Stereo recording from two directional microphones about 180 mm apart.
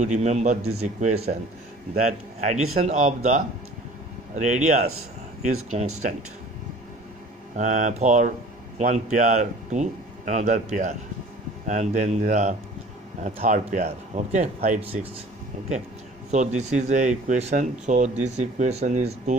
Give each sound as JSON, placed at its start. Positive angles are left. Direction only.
{"t": 0.0, "sound": "speech", "side_deg": -40}
{"t": 7.5, "sound": "speech", "side_deg": -45}
{"t": 16.3, "sound": "speech", "side_deg": -40}